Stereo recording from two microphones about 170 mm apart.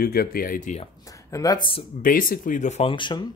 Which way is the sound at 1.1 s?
20° left (ahead or behind).